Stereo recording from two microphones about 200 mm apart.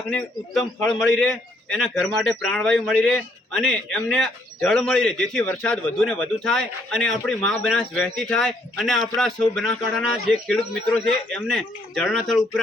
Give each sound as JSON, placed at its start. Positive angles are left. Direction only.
{"t": 0.1, "sound": "a man's voice", "side_deg": 5}